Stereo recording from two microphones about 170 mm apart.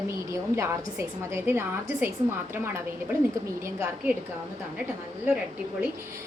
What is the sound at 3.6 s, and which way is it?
Speech, 15° right (ahead or behind).